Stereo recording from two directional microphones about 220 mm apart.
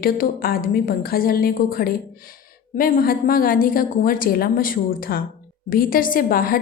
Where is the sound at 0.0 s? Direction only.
40° left (ahead or behind).